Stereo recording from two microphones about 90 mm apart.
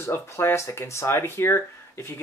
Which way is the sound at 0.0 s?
25° left (ahead or behind).